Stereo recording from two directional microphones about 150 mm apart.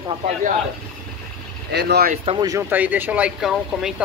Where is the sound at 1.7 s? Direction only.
90° right.